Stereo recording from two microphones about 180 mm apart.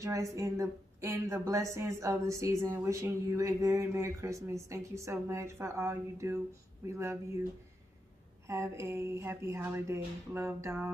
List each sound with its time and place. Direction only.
0.0 s a woman's voice: 20° right (ahead or behind)
8.5 s a woman's voice: 15° right (ahead or behind)